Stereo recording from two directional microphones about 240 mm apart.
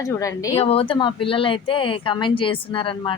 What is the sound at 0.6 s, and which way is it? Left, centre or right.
Speech, left.